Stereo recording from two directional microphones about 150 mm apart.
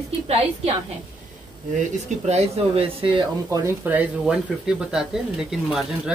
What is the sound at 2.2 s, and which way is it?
Speech, 45° right (ahead or behind).